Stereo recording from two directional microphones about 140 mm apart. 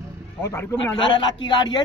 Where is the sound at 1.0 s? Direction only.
35° left (ahead or behind).